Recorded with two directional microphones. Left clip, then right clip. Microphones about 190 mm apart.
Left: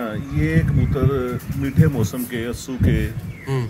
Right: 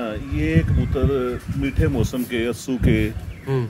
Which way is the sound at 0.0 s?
5° right (ahead or behind).